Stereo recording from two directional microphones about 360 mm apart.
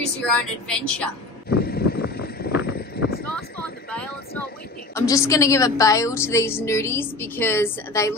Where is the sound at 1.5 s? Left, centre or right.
Left.